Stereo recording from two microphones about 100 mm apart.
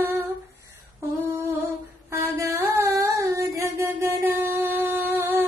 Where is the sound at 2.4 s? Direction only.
30° right (ahead or behind).